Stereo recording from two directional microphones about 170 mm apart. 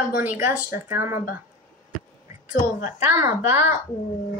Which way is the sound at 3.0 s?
15° right (ahead or behind).